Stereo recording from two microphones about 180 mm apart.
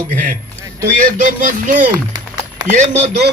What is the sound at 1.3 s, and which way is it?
Speech, 45° right (ahead or behind).